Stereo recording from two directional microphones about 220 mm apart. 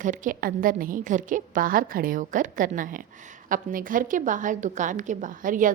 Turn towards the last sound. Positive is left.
turn(degrees=-35)  # may be behind; listen again after turning